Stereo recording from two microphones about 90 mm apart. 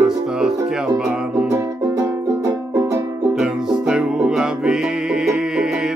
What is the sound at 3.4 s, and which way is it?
Music, 10° right (ahead or behind).